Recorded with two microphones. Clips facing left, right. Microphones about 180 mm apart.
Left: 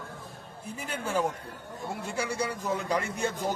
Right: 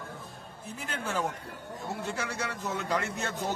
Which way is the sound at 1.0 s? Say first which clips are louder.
Left 4 dB; 10° left (ahead or behind).